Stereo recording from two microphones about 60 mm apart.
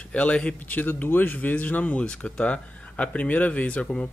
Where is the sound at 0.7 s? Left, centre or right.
Left.